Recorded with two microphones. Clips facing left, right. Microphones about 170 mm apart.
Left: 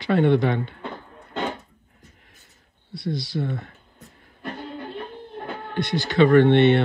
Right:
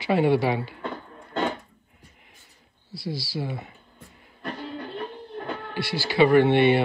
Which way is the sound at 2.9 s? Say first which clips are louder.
Left 4 dB; 5° right (ahead or behind).